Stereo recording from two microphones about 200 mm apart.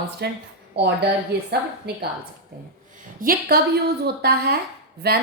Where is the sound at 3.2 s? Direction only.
45° right (ahead or behind).